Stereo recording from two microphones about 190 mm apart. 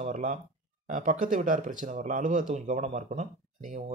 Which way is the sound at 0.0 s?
40° right (ahead or behind).